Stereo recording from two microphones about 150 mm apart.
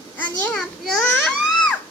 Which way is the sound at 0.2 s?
10° left (ahead or behind).